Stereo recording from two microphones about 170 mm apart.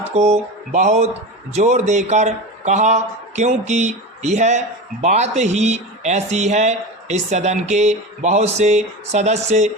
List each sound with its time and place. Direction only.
0.2 s speech: 45° right (ahead or behind)